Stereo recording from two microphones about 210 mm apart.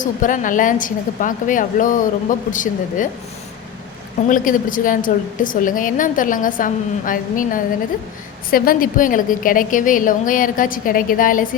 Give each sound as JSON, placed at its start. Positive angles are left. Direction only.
{"t": 0.0, "sound": "a woman's voice", "side_deg": 40}
{"t": 4.3, "sound": "a woman's voice", "side_deg": 40}